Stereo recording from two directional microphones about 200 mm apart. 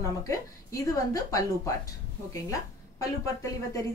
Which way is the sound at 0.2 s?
15° left (ahead or behind).